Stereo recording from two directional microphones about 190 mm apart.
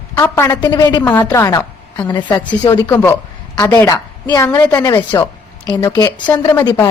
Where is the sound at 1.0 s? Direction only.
10° left (ahead or behind).